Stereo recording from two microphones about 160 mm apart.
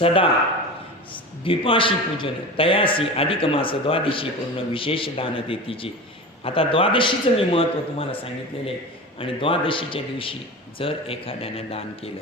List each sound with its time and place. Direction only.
0.0 s a man's voice: 35° left (ahead or behind)